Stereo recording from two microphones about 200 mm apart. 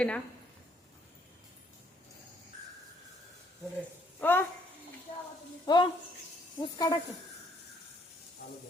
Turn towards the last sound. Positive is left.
turn(degrees=20)  # may be behind; listen again after turning